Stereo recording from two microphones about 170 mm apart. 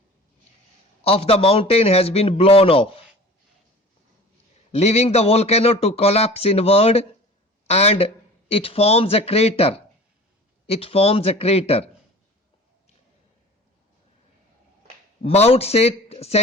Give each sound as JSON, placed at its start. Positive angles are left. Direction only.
{"t": 1.0, "sound": "speech", "side_deg": 35}
{"t": 4.7, "sound": "speech", "side_deg": 40}
{"t": 15.2, "sound": "speech", "side_deg": 35}